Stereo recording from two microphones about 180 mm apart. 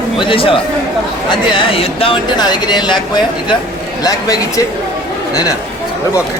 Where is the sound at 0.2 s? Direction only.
30° left (ahead or behind).